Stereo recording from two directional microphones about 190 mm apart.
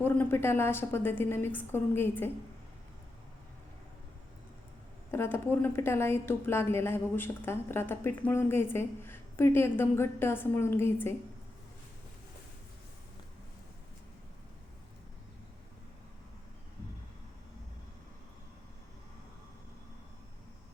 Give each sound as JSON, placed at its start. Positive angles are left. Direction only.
{"t": 0.0, "sound": "a woman's voice", "side_deg": 10}
{"t": 5.1, "sound": "a woman's voice", "side_deg": 10}